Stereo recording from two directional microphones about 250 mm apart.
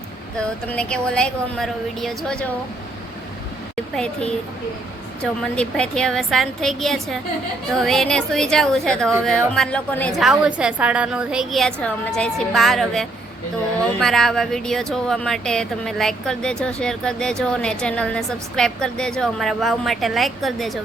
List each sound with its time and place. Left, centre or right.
0.3 s speech: centre
3.9 s speech: centre